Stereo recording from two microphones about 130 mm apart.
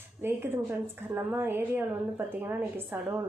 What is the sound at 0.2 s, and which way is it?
A woman's voice, 15° right (ahead or behind).